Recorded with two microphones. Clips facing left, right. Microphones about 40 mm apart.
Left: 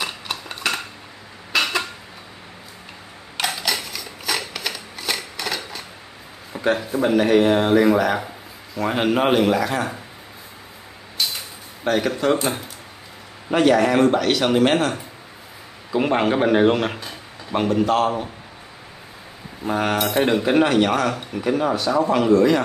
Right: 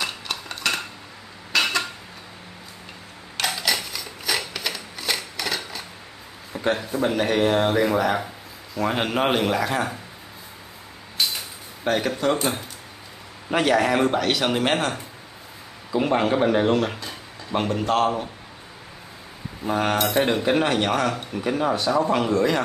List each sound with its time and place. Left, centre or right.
0.0 s a sound: centre
3.3 s a sound: centre
6.5 s speech: centre
11.8 s speech: centre
15.9 s a man's voice: centre
17.5 s speech: centre
19.6 s speech: centre